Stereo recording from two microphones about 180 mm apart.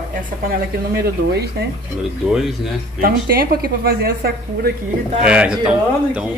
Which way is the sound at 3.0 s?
55° right (ahead or behind).